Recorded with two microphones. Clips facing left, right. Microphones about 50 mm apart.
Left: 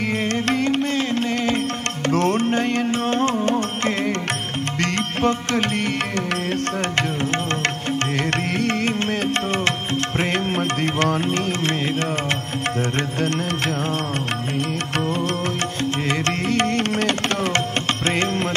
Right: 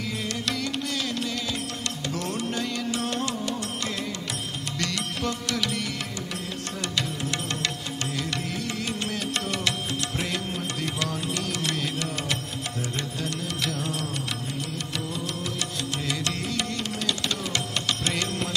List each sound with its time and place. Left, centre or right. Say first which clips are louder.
0.2 s music: left 9 dB; left
13.2 s music: left 8 dB; left
15.0 s music: left 10 dB; left